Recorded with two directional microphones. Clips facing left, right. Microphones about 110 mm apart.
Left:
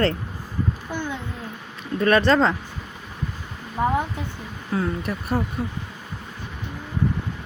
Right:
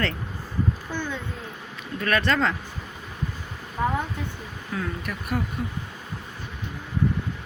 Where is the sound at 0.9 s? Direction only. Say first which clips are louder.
Left 2 dB; 15° left (ahead or behind).